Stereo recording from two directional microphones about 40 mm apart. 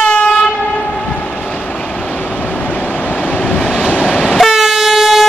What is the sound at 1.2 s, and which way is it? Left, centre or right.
Vehicle, left.